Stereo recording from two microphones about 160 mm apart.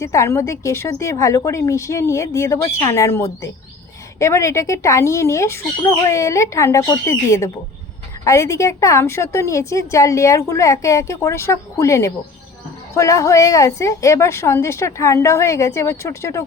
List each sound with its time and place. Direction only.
0.0 s a woman's voice: 20° left (ahead or behind)